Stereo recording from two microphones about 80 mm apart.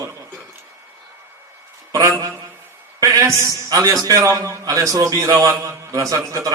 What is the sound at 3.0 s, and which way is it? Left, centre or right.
A man's voice, right.